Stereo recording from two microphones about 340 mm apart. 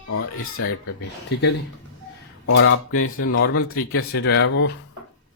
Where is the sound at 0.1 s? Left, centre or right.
Left.